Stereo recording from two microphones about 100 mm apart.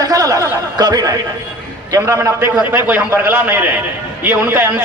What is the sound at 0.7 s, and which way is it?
A man's voice, 40° right (ahead or behind).